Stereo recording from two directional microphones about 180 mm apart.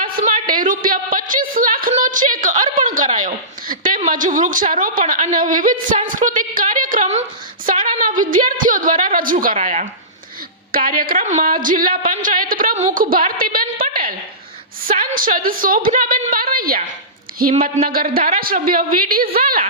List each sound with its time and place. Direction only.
0.0 s a woman's voice: 50° right (ahead or behind)
10.7 s a woman's voice: 50° right (ahead or behind)
17.8 s a woman's voice: 55° right (ahead or behind)